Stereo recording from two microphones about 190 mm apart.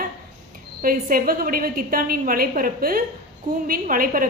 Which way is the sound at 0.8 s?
45° right (ahead or behind).